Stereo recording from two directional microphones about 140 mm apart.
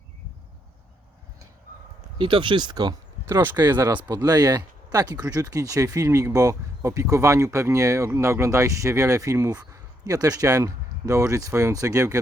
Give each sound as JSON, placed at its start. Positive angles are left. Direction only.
{"t": 2.1, "sound": "speech", "side_deg": -35}
{"t": 3.2, "sound": "speech", "side_deg": -20}